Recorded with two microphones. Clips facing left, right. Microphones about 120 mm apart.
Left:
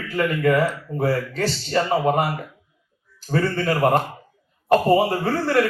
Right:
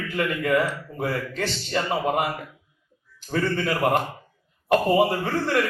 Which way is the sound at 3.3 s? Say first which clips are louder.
Left 3 dB; 40° left (ahead or behind).